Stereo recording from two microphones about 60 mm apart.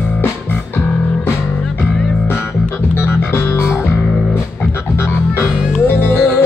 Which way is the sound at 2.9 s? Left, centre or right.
Left.